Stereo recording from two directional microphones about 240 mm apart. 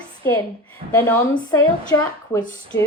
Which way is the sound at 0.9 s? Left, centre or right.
Centre.